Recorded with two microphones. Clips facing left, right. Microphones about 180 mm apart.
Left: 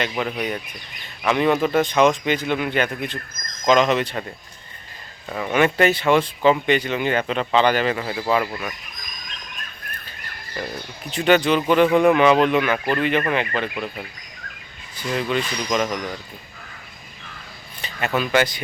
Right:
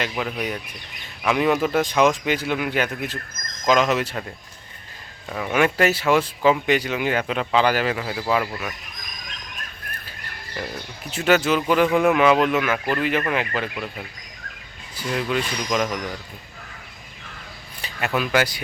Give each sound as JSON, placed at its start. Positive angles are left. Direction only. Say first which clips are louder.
{"t": 0.0, "sound": "speech", "louder": "left 2 dB", "side_deg": 0}
{"t": 5.3, "sound": "speech", "louder": "left 1 dB", "side_deg": 0}
{"t": 10.6, "sound": "speech", "louder": "left 1 dB", "side_deg": 0}
{"t": 15.1, "sound": "speech", "louder": "left 1 dB", "side_deg": 0}
{"t": 17.8, "sound": "speech", "louder": "left 1 dB", "side_deg": -5}